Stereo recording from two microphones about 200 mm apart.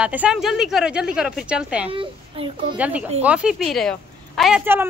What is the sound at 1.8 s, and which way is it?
Speech, 30° right (ahead or behind).